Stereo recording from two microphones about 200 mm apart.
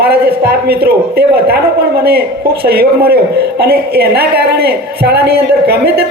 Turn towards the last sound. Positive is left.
turn(degrees=-50)  # may be behind; listen again after turning